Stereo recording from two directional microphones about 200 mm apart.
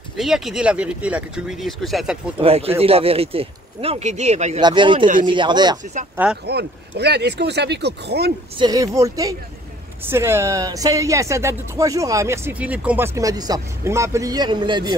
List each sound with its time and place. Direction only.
0.2 s speech: centre (ahead or behind)
2.3 s speech: 30° right (ahead or behind)
4.6 s speech: 25° right (ahead or behind)
6.4 s speech: 55° right (ahead or behind)
8.5 s speech: 20° right (ahead or behind)